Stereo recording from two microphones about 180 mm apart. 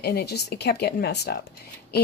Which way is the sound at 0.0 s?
60° left (ahead or behind).